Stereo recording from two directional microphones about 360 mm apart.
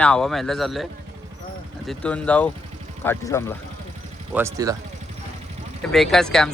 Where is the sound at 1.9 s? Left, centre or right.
Centre.